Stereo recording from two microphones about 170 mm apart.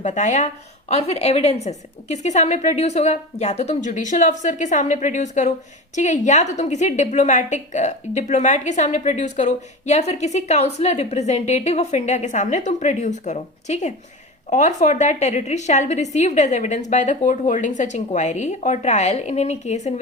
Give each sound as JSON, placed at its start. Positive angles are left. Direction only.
{"t": 0.0, "sound": "a woman's voice", "side_deg": 45}